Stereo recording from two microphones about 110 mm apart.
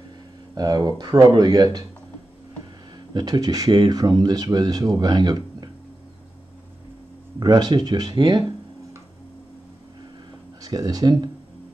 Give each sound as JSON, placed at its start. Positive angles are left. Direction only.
{"t": 0.6, "sound": "speech", "side_deg": -35}
{"t": 3.1, "sound": "speech", "side_deg": -40}
{"t": 7.3, "sound": "speech", "side_deg": -40}
{"t": 10.6, "sound": "speech", "side_deg": -35}